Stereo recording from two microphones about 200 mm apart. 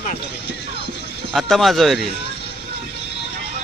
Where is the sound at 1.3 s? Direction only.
Centre (ahead or behind).